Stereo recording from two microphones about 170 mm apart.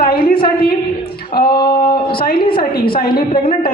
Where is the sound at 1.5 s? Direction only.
25° left (ahead or behind).